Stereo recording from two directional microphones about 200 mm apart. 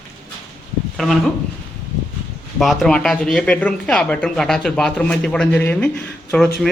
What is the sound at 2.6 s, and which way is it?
Speech, centre (ahead or behind).